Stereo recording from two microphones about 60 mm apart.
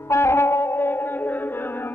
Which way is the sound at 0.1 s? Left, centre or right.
Left.